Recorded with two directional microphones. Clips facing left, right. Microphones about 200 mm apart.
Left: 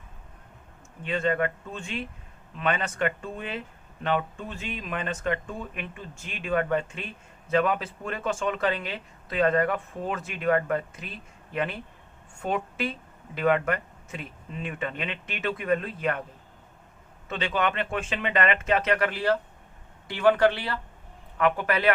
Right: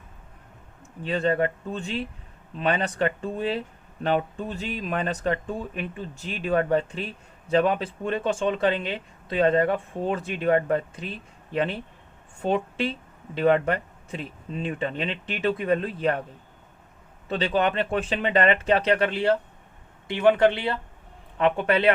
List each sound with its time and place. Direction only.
1.0 s a man's voice: 35° right (ahead or behind)
17.2 s a man's voice: 35° right (ahead or behind)